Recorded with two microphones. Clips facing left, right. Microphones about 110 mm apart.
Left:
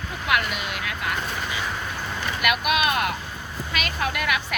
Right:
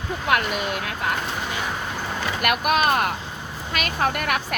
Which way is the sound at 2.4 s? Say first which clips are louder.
Right 2 dB; 45° right (ahead or behind).